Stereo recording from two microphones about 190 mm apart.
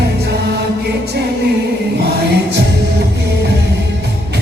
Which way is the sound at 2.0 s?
60° right (ahead or behind).